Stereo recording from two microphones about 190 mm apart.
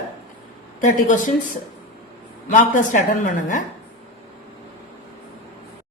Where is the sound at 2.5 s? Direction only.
45° left (ahead or behind).